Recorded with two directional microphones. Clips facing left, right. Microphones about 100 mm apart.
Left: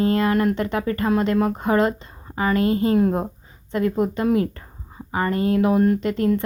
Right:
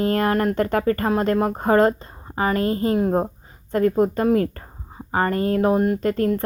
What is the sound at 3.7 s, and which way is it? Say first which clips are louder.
A woman's voice: right 3 dB; 40° right (ahead or behind).